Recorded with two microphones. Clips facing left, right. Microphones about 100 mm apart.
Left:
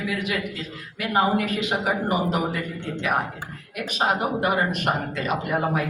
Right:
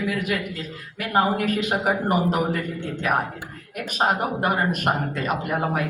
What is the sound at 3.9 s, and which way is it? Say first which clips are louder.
A man's voice: right 1 dB; 45° right (ahead or behind).